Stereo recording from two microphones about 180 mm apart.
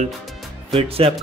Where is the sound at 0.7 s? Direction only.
35° right (ahead or behind).